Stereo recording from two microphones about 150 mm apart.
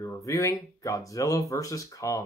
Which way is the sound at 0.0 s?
20° left (ahead or behind).